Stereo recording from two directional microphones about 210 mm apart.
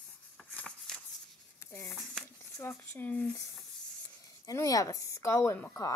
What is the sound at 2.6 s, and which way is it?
Speech, 10° left (ahead or behind).